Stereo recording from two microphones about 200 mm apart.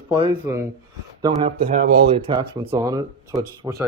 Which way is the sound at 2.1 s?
25° right (ahead or behind).